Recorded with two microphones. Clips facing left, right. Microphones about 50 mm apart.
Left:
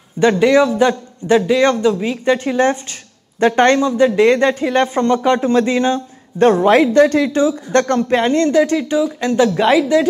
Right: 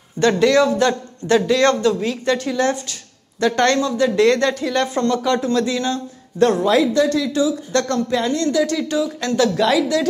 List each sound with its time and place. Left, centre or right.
0.2 s a man's voice: centre